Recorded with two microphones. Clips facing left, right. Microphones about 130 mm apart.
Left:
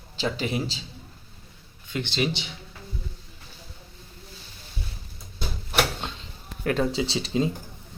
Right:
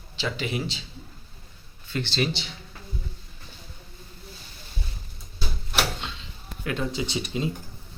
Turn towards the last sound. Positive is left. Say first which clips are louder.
# left 3 dB
turn(degrees=30)  # may be behind; listen again after turning